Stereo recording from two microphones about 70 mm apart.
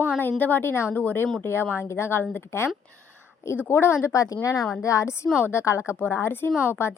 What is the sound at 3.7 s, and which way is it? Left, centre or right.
A woman's voice, left.